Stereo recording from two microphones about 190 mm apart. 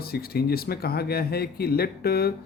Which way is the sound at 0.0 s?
55° left (ahead or behind).